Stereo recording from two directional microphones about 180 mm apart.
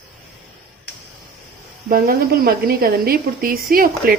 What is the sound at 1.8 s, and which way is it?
Speech, 55° right (ahead or behind).